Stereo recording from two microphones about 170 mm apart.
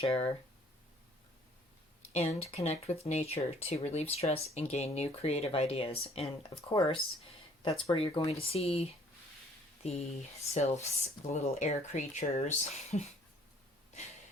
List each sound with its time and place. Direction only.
0.0 s speech: 35° left (ahead or behind)
2.1 s speech: 40° left (ahead or behind)